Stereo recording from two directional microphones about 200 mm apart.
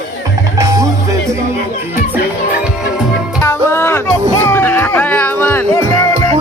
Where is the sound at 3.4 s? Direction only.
10° left (ahead or behind).